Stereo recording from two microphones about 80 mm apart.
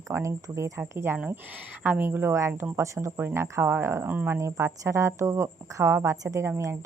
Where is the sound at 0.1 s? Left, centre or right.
Right.